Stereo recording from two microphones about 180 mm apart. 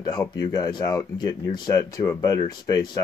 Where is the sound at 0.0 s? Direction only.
20° left (ahead or behind).